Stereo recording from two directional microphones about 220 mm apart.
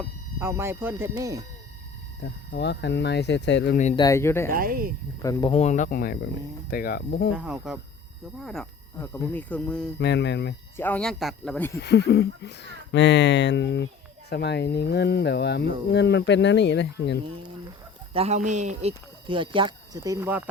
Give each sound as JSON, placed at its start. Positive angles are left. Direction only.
{"t": 0.3, "sound": "speech", "side_deg": -10}
{"t": 2.2, "sound": "speech", "side_deg": 50}
{"t": 3.9, "sound": "speech", "side_deg": 15}
{"t": 4.5, "sound": "speech", "side_deg": -40}
{"t": 5.2, "sound": "speech", "side_deg": 20}
{"t": 7.3, "sound": "speech", "side_deg": -5}
{"t": 10.0, "sound": "speech", "side_deg": 50}
{"t": 10.8, "sound": "speech", "side_deg": 5}
{"t": 11.8, "sound": "speech", "side_deg": 50}
{"t": 18.1, "sound": "speech", "side_deg": -30}